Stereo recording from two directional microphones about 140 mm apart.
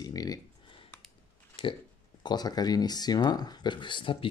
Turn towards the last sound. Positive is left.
turn(degrees=40)  # may be behind; listen again after turning